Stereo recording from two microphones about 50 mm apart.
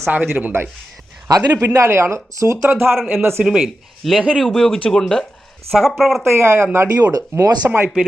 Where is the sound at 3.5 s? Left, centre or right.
Centre.